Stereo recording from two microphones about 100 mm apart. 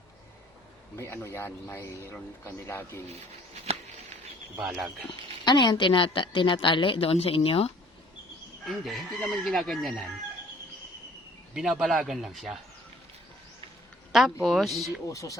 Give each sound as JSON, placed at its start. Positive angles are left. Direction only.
{"t": 0.9, "sound": "speech", "side_deg": 25}
{"t": 3.2, "sound": "speech", "side_deg": -90}
{"t": 5.5, "sound": "a woman's voice", "side_deg": 50}
{"t": 8.6, "sound": "speech", "side_deg": 0}
{"t": 11.5, "sound": "speech", "side_deg": -5}
{"t": 14.1, "sound": "speech", "side_deg": -5}
{"t": 15.0, "sound": "speech", "side_deg": 35}